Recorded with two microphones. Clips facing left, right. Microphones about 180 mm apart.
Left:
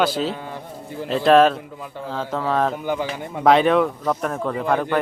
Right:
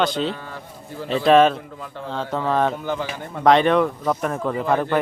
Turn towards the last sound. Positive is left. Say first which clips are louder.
# even
turn(degrees=0)  # may be behind; listen again after turning